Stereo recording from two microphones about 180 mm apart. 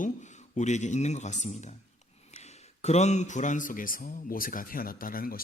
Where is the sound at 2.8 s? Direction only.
40° left (ahead or behind).